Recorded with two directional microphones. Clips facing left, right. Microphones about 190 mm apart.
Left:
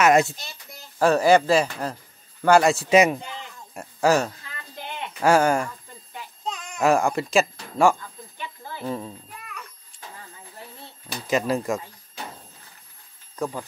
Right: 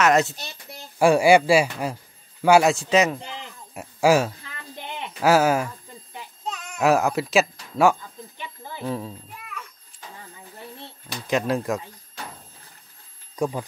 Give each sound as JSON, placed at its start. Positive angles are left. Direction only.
{"t": 0.0, "sound": "speech", "side_deg": 10}
{"t": 0.9, "sound": "speech", "side_deg": -10}
{"t": 2.7, "sound": "speech", "side_deg": 10}
{"t": 3.7, "sound": "speech", "side_deg": -5}
{"t": 8.4, "sound": "a sound", "side_deg": -15}
{"t": 8.8, "sound": "a sound", "side_deg": 0}
{"t": 11.1, "sound": "speech", "side_deg": 0}
{"t": 13.4, "sound": "speech", "side_deg": -15}